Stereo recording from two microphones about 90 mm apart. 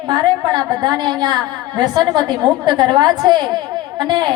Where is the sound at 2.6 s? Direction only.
55° right (ahead or behind).